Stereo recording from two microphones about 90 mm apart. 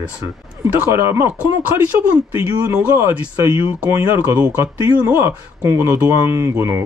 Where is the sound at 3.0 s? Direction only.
30° right (ahead or behind).